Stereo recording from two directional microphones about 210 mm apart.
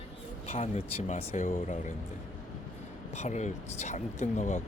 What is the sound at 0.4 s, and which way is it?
Speech, 35° left (ahead or behind).